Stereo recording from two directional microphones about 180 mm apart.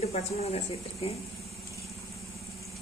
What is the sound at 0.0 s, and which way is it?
Speech, 35° left (ahead or behind).